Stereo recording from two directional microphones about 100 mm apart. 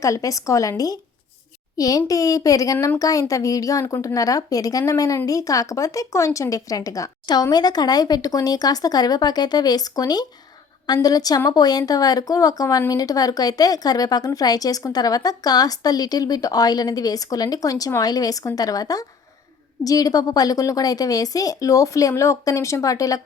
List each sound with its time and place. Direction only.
0.0 s a woman's voice: 35° left (ahead or behind)